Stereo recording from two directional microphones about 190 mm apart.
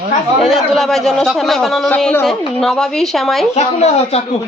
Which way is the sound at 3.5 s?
35° left (ahead or behind).